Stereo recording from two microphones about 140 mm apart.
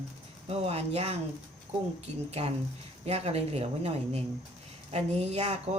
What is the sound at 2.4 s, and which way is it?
Speech, 50° right (ahead or behind).